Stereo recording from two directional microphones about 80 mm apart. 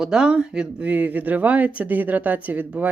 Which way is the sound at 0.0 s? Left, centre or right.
Centre.